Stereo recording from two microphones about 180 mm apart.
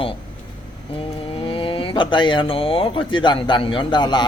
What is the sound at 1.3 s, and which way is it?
Speech, 30° left (ahead or behind).